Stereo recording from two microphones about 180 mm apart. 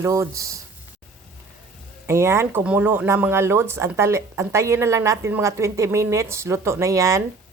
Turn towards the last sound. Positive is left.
turn(degrees=-15)  # may be behind; listen again after turning